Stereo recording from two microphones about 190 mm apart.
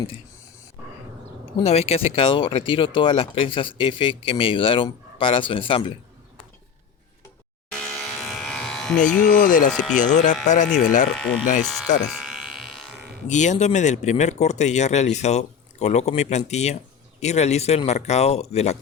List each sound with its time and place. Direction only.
1.5 s speech: 30° left (ahead or behind)
7.7 s electric shaver: 5° left (ahead or behind)
9.0 s speech: 5° left (ahead or behind)
9.4 s speech: 45° left (ahead or behind)
11.6 s speech: centre (ahead or behind)
12.1 s electric shaver: 5° right (ahead or behind)
13.2 s speech: 40° left (ahead or behind)